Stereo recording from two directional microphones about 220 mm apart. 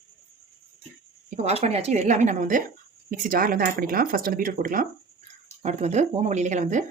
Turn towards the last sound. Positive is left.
turn(degrees=-35)  # may be behind; listen again after turning